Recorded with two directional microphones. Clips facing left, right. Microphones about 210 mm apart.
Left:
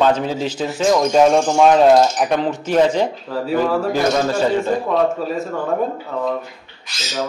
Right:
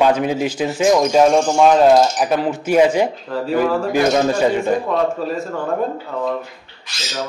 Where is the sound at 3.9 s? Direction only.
15° right (ahead or behind).